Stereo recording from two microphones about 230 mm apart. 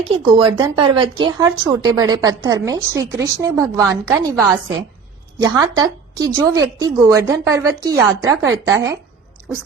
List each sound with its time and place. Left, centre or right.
0.3 s speech: centre